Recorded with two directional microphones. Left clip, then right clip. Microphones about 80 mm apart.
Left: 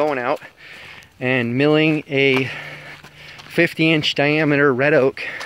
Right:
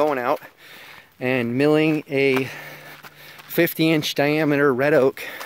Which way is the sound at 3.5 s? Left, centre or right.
Right.